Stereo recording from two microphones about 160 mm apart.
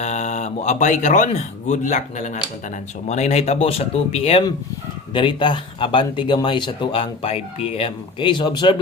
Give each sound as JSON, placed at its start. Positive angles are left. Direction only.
{"t": 0.0, "sound": "speech", "side_deg": 45}